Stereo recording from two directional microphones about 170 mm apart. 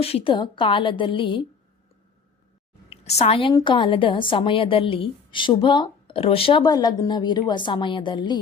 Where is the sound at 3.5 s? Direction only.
25° left (ahead or behind).